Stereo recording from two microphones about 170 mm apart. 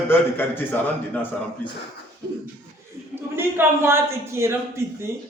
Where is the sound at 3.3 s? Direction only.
15° right (ahead or behind).